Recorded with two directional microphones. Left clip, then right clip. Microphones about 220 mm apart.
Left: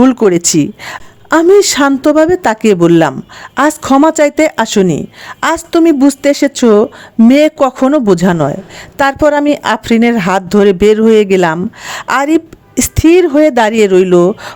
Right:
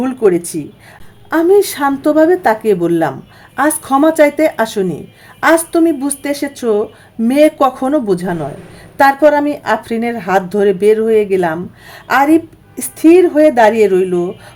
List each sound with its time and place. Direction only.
0.0 s speech: 40° left (ahead or behind)